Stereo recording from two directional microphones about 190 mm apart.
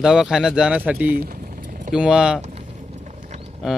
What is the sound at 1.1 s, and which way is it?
Speech, 50° right (ahead or behind).